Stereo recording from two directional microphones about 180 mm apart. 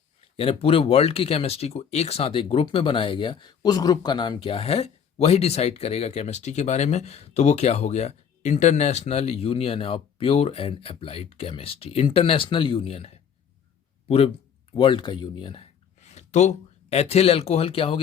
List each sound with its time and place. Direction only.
0.3 s speech: 30° left (ahead or behind)
14.7 s speech: 30° left (ahead or behind)